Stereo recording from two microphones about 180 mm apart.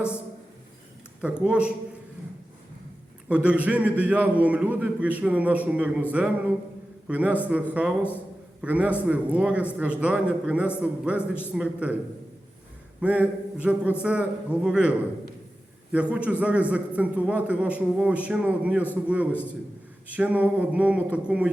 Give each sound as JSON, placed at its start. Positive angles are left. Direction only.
{"t": 1.2, "sound": "a man's voice", "side_deg": -5}
{"t": 3.2, "sound": "a man's voice", "side_deg": -5}
{"t": 13.0, "sound": "a man's voice", "side_deg": -10}
{"t": 19.3, "sound": "a man's voice", "side_deg": 10}
{"t": 20.1, "sound": "a man's voice", "side_deg": -10}